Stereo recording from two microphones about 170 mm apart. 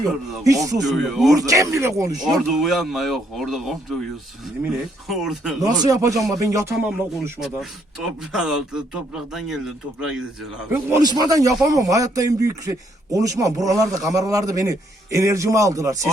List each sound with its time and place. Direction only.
0.4 s a man's voice: 20° right (ahead or behind)
0.8 s speech: centre (ahead or behind)
1.4 s a man's voice: 20° right (ahead or behind)
2.5 s speech: centre (ahead or behind)
5.0 s speech: centre (ahead or behind)
5.6 s a man's voice: 20° right (ahead or behind)
6.8 s speech: 5° right (ahead or behind)
11.0 s a man's voice: 25° right (ahead or behind)